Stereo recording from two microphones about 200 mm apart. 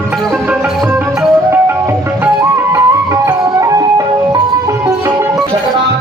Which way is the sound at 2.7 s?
15° right (ahead or behind).